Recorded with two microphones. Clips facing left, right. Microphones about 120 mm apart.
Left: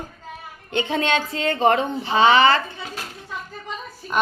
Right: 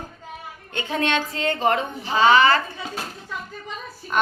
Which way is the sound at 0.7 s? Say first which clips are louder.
Left 2 dB; 25° left (ahead or behind).